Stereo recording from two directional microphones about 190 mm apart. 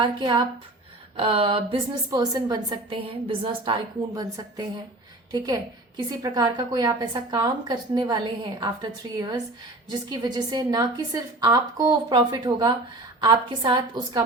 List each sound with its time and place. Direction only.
0.0 s a woman's voice: 25° right (ahead or behind)
6.1 s a woman's voice: 20° right (ahead or behind)